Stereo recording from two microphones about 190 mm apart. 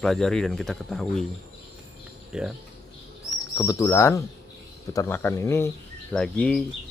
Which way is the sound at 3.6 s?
15° left (ahead or behind).